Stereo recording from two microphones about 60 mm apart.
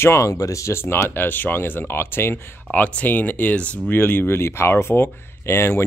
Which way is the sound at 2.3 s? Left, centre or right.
Left.